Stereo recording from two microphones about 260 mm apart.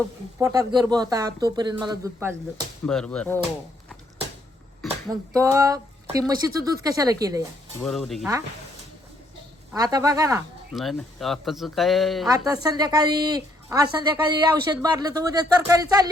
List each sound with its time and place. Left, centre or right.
0.3 s a woman's voice: centre
2.8 s speech: centre
4.8 s speech: centre
5.4 s a woman's voice: centre
7.8 s speech: centre
9.7 s a woman's voice: centre
10.8 s speech: centre
12.6 s a woman's voice: centre